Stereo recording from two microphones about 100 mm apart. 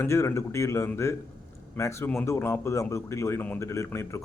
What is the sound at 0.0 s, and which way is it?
Speech, 25° left (ahead or behind).